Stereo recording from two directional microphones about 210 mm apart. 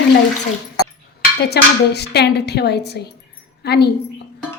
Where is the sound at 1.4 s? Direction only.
50° left (ahead or behind).